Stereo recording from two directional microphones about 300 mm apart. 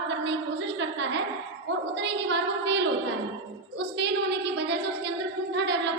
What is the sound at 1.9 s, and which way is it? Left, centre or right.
Speech, right.